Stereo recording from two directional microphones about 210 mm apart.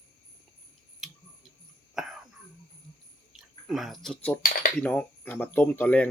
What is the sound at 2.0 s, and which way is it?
Cough, centre (ahead or behind).